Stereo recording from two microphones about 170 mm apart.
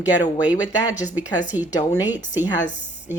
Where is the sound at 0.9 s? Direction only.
10° right (ahead or behind).